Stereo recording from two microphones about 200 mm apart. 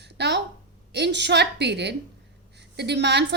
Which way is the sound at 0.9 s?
60° right (ahead or behind).